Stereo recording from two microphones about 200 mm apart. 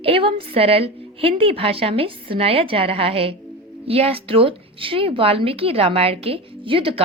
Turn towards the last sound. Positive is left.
turn(degrees=-25)  # may be behind; listen again after turning